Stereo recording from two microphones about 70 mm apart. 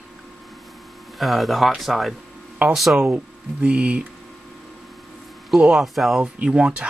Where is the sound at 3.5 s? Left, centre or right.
Centre.